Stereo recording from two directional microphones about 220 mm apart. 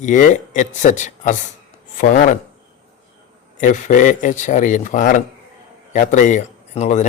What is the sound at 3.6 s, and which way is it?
Speech, 35° left (ahead or behind).